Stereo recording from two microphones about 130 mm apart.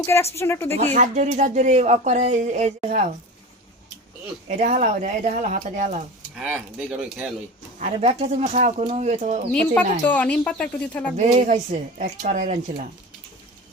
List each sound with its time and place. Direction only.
0.0 s speech: 20° left (ahead or behind)
0.9 s speech: 60° right (ahead or behind)
4.4 s speech: 75° right (ahead or behind)
6.3 s speech: 10° right (ahead or behind)
7.8 s speech: 60° right (ahead or behind)
9.5 s speech: 10° left (ahead or behind)
11.2 s speech: 65° right (ahead or behind)